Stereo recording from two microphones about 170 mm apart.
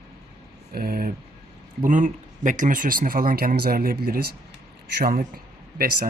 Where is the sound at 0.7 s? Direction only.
60° right (ahead or behind).